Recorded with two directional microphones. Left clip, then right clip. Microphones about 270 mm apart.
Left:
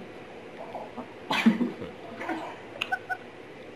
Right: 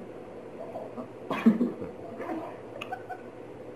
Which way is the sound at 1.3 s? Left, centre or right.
Centre.